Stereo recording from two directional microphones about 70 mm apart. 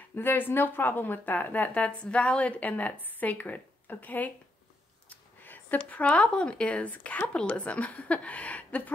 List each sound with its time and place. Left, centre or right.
0.1 s speech: left
5.4 s speech: left